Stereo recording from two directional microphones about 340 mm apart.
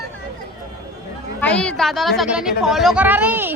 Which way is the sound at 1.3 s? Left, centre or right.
Centre.